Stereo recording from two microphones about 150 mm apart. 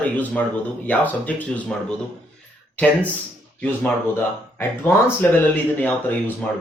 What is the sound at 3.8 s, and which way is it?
Speech, 15° left (ahead or behind).